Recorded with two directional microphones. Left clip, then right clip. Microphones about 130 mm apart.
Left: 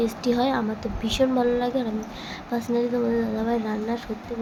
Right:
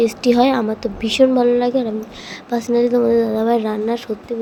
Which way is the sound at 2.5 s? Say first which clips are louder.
Right 9 dB; 55° right (ahead or behind).